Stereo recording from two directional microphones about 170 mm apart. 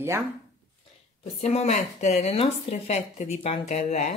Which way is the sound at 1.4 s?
40° left (ahead or behind).